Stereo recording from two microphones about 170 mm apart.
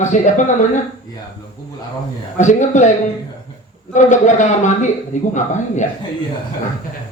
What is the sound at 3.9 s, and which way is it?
A man's voice, 45° left (ahead or behind).